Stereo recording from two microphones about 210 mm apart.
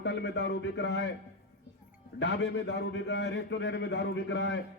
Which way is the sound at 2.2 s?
55° left (ahead or behind).